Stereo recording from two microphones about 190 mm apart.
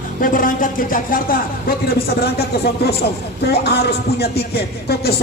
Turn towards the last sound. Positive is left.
turn(degrees=55)  # may be behind; listen again after turning